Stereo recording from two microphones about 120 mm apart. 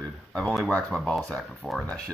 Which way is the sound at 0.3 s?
10° left (ahead or behind).